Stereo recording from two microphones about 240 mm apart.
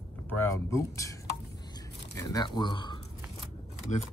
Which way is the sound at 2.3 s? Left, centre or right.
Centre.